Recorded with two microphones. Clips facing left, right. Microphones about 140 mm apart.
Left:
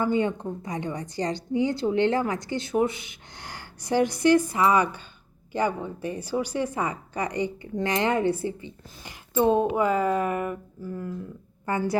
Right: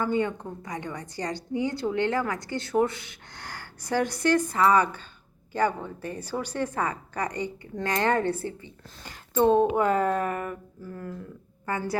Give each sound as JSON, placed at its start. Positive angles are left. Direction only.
{"t": 0.0, "sound": "a woman's voice", "side_deg": 20}
{"t": 11.6, "sound": "speech", "side_deg": 20}